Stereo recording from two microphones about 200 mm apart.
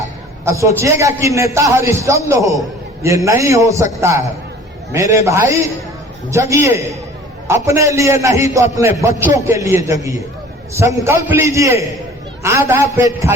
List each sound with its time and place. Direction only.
0.4 s a man's voice: 15° right (ahead or behind)